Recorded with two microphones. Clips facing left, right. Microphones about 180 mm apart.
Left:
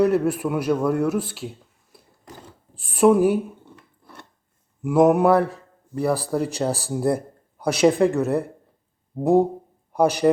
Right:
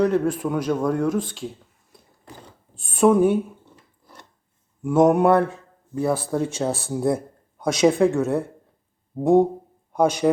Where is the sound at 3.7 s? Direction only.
60° left (ahead or behind).